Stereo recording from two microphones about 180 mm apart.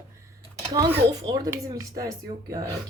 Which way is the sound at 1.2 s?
20° right (ahead or behind).